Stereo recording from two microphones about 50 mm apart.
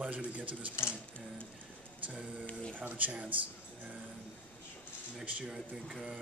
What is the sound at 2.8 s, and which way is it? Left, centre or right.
Speech, right.